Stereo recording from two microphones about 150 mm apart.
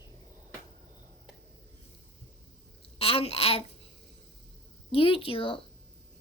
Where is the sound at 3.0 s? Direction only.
40° left (ahead or behind).